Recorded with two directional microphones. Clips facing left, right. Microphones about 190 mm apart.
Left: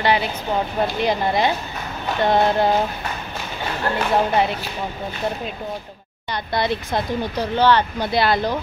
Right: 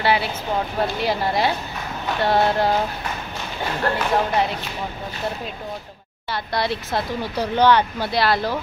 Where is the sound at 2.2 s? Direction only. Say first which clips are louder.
Left 2 dB; 20° left (ahead or behind).